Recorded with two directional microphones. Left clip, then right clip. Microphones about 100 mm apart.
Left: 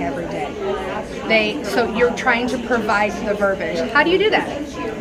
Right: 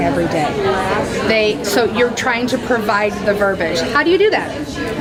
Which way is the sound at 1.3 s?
5° left (ahead or behind).